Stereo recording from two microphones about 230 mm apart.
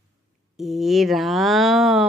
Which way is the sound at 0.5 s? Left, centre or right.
Centre.